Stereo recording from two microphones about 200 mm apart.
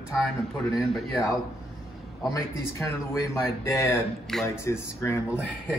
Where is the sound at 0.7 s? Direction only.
Centre (ahead or behind).